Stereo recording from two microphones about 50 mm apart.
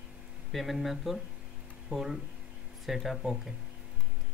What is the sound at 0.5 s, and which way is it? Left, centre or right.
Speech, centre.